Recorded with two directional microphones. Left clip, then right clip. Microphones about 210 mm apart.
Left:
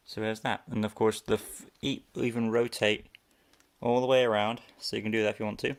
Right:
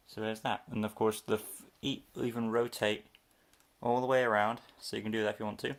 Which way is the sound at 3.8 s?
25° left (ahead or behind).